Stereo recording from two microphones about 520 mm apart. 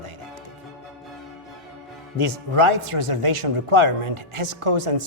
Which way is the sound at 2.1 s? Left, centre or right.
Right.